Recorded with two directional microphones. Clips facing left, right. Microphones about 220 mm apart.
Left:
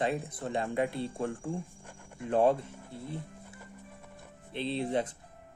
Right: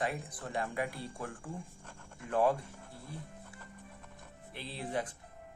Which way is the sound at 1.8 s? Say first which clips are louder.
Left 7 dB; 15° left (ahead or behind).